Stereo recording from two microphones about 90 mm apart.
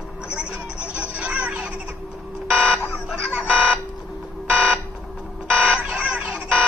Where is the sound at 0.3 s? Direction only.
10° right (ahead or behind).